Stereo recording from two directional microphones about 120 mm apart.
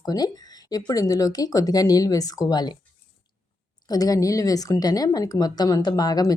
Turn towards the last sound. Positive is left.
turn(degrees=35)  # may be behind; listen again after turning